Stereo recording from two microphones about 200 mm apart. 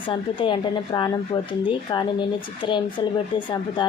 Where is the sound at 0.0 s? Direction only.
25° left (ahead or behind).